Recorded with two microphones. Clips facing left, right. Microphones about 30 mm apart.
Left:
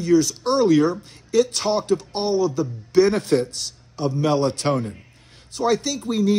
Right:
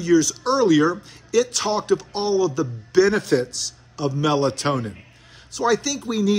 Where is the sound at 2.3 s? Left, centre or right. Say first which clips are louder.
Right 1 dB; left.